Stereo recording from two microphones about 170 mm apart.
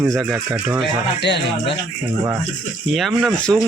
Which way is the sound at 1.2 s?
90° left.